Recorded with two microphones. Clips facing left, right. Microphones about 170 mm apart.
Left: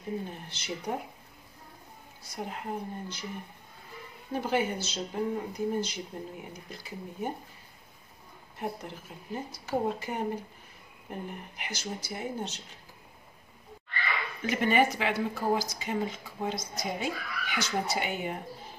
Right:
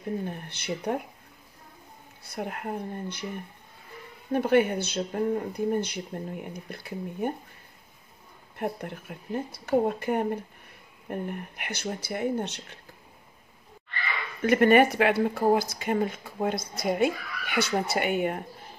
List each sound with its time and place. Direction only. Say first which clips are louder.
0.2 s speech: right 5 dB; 55° right (ahead or behind)
2.2 s speech: right 4 dB; 60° right (ahead or behind)
4.3 s speech: right 7 dB; 60° right (ahead or behind)
8.5 s speech: right 4 dB; 60° right (ahead or behind)
14.4 s speech: right 7 dB; 55° right (ahead or behind)